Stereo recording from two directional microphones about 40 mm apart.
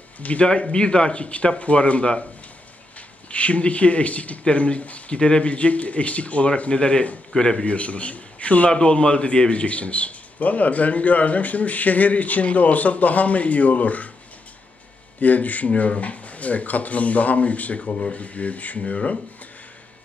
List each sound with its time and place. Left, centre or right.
0.2 s a man's voice: left
0.5 s speech: left
3.3 s a man's voice: left
7.3 s a man's voice: centre
7.6 s a man's voice: left
15.1 s a man's voice: left